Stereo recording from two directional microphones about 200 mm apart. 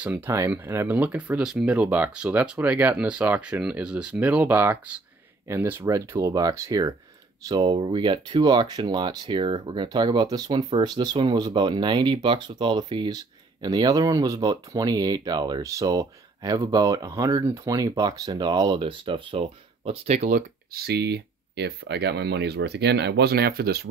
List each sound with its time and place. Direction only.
0.0 s speech: 10° right (ahead or behind); by 23.9 s 50° right (ahead or behind)